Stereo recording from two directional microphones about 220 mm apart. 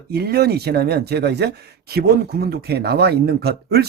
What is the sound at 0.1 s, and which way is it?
Speech, 45° right (ahead or behind).